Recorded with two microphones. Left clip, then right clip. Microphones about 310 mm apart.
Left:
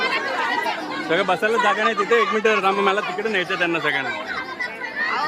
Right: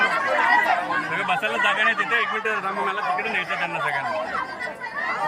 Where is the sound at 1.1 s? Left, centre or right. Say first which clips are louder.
Left 9 dB; centre.